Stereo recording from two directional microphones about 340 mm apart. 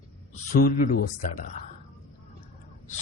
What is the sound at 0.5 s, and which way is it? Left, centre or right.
Speech, left.